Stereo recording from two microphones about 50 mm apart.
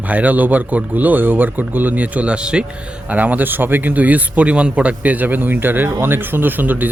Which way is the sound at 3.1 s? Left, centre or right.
Right.